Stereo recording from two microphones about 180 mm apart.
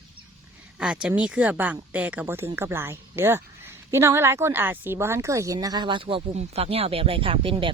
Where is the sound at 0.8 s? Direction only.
5° right (ahead or behind).